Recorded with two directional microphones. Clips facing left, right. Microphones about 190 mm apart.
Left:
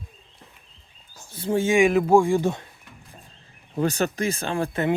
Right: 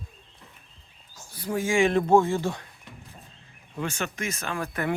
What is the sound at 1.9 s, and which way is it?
Speech, 10° left (ahead or behind).